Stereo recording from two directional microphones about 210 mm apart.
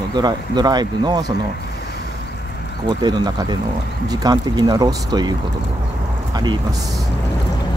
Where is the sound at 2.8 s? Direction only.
20° right (ahead or behind).